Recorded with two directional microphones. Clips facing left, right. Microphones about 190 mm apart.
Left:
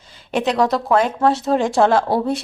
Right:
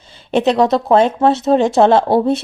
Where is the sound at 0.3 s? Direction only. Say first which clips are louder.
Right 5 dB; 25° right (ahead or behind).